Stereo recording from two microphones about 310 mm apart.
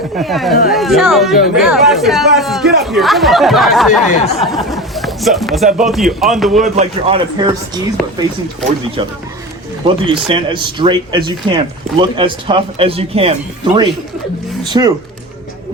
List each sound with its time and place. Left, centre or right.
0.2 s speech: centre
6.6 s speech: centre
8.0 s speech: centre
9.0 s speech: centre
14.6 s speech: centre